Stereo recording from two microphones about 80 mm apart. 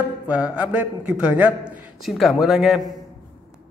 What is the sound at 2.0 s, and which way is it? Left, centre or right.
Speech, centre.